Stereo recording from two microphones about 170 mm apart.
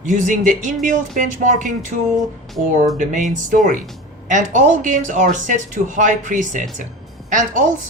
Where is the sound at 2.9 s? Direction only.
50° right (ahead or behind).